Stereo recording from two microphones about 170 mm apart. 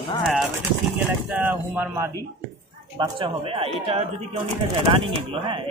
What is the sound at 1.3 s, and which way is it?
Speech, 10° right (ahead or behind).